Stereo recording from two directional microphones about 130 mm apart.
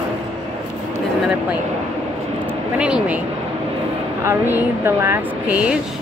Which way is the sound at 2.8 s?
10° right (ahead or behind).